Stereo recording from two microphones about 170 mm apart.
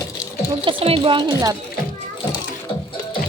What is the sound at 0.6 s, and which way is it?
Speech, 30° right (ahead or behind).